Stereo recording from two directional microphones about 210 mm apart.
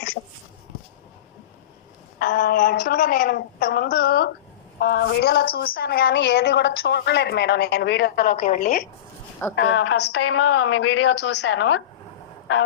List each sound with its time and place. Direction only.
2.1 s a woman's voice: 45° left (ahead or behind)
9.6 s a woman's voice: 60° left (ahead or behind)